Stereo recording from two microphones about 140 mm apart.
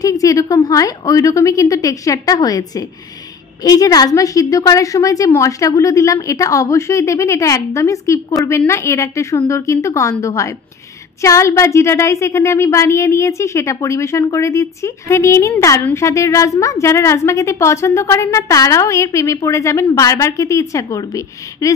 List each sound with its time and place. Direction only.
0.0 s a woman's voice: 25° left (ahead or behind)